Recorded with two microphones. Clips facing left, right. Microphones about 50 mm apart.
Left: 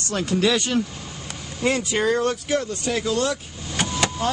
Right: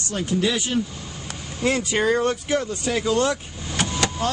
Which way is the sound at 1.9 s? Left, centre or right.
Centre.